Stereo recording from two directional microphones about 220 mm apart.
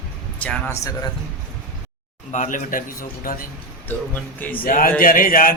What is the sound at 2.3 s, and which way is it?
Speech, 35° left (ahead or behind).